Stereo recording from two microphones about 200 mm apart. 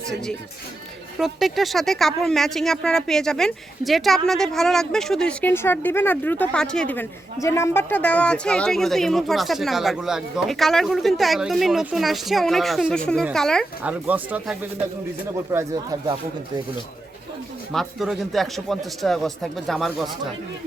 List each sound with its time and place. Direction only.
1.2 s speech: centre (ahead or behind)
13.8 s speech: 10° right (ahead or behind)
17.7 s speech: centre (ahead or behind)